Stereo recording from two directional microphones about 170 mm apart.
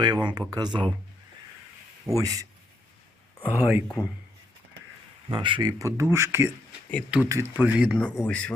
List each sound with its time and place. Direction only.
0.0 s speech: 25° right (ahead or behind)
2.0 s speech: 20° right (ahead or behind)
3.8 s speech: 15° left (ahead or behind)
5.3 s speech: 30° right (ahead or behind); by 7.9 s 10° right (ahead or behind)
8.2 s speech: 5° left (ahead or behind)